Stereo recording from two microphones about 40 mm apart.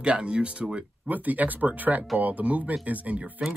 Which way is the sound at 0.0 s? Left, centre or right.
Right.